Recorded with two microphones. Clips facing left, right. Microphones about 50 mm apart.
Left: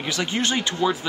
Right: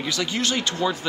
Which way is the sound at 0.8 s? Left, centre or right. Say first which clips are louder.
Left 3 dB; centre.